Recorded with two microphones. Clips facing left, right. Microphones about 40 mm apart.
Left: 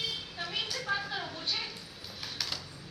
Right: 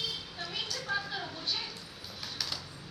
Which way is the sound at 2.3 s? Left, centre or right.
Centre.